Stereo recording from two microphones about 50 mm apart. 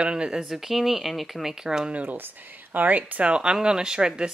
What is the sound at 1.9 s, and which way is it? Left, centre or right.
Speech, right.